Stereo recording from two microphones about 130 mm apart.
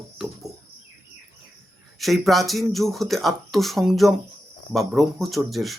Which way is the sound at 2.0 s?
Centre (ahead or behind).